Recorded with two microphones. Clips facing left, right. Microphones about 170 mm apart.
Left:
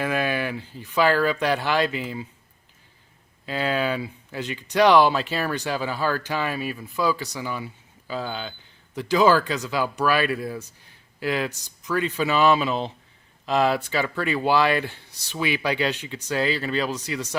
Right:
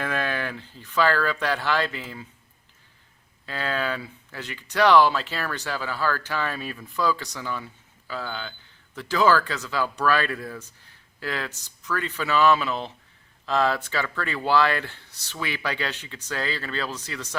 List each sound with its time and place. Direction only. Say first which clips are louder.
0.0 s speech: left 3 dB; 10° left (ahead or behind)
3.4 s speech: left 4 dB; 15° left (ahead or behind)